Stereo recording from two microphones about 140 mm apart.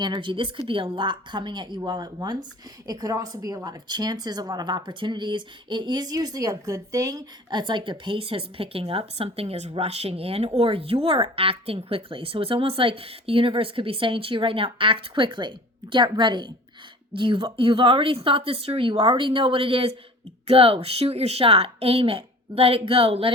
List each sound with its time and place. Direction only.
0.0 s a woman's voice: 35° right (ahead or behind)